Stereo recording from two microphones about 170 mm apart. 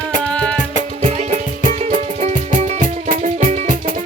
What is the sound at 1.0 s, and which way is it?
Music, 40° right (ahead or behind).